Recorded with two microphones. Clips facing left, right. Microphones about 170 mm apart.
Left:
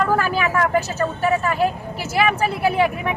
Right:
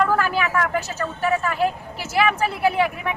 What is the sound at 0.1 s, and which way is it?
Speech, 15° left (ahead or behind).